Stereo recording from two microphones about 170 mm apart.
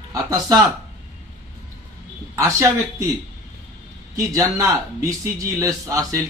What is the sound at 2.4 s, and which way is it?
Speech, 20° right (ahead or behind).